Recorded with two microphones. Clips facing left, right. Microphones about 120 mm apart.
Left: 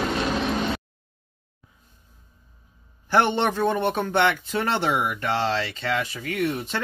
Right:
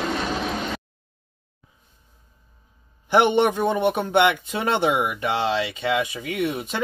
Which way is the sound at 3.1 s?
15° right (ahead or behind).